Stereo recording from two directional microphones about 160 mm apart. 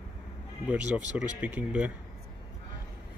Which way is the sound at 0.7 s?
10° right (ahead or behind).